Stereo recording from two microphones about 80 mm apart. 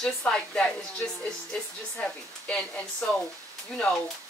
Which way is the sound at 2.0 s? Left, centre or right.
Centre.